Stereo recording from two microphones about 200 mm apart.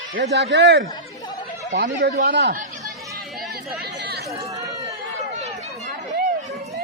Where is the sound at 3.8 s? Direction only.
55° right (ahead or behind).